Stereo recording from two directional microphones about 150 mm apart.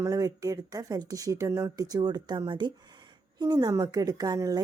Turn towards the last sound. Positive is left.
turn(degrees=-25)  # may be behind; listen again after turning